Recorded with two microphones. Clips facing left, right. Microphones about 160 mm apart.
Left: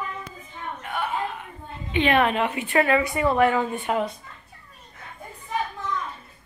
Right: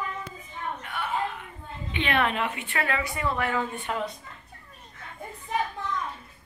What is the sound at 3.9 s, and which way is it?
Speech, 15° left (ahead or behind).